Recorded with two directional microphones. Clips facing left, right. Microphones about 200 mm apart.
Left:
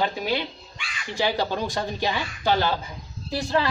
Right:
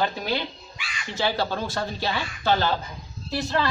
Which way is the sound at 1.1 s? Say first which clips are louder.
Left 1 dB; 15° left (ahead or behind).